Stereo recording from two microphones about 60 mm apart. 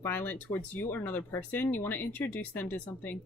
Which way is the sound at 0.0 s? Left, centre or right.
Left.